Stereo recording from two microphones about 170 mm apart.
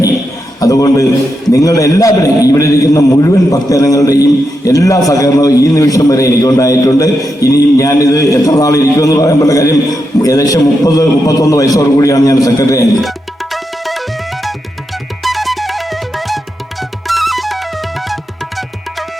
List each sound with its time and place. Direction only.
0.6 s a man's voice: 20° left (ahead or behind)
13.0 s music: centre (ahead or behind)
15.2 s music: centre (ahead or behind)